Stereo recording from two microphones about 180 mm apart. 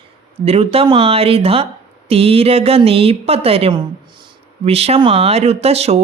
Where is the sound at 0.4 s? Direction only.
35° right (ahead or behind).